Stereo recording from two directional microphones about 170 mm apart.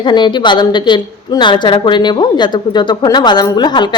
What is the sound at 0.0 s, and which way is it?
A woman's voice, 25° left (ahead or behind).